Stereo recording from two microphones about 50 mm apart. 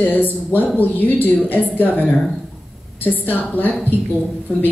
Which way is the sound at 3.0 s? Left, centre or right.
Left.